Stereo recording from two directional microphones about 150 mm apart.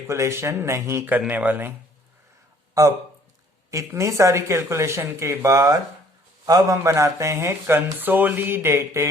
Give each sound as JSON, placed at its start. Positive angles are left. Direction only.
{"t": 0.1, "sound": "speech", "side_deg": -20}
{"t": 2.8, "sound": "speech", "side_deg": -20}